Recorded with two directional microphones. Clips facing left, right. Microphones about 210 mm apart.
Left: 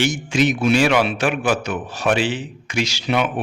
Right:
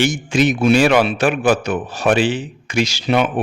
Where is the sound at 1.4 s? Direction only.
50° right (ahead or behind).